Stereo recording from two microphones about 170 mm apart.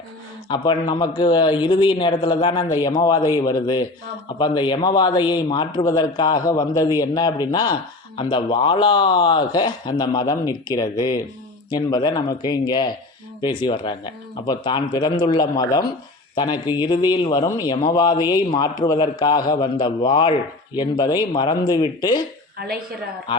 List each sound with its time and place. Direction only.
0.5 s a man's voice: 25° left (ahead or behind)
22.5 s a woman's voice: 70° right (ahead or behind)